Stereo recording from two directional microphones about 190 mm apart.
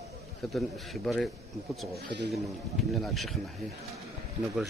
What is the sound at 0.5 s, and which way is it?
Speech, centre (ahead or behind).